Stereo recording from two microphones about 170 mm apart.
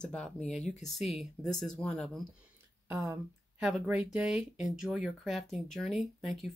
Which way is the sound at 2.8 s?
15° right (ahead or behind).